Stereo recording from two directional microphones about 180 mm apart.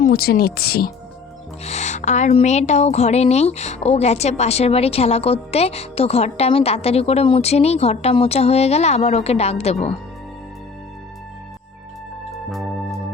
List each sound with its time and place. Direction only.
0.0 s speech: 55° left (ahead or behind)
1.6 s a woman's voice: 40° left (ahead or behind)
12.5 s music: centre (ahead or behind)